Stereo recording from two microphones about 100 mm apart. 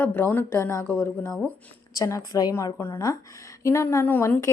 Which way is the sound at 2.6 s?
25° left (ahead or behind).